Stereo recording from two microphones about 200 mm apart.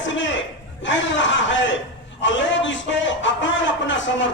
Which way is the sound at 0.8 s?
65° left (ahead or behind).